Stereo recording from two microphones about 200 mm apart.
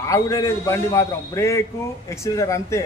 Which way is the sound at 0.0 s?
15° left (ahead or behind).